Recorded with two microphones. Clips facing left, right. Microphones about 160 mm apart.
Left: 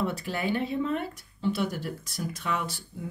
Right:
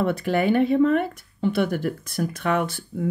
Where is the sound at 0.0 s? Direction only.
60° right (ahead or behind).